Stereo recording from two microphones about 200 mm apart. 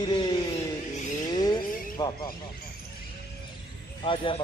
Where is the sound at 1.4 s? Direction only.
20° left (ahead or behind).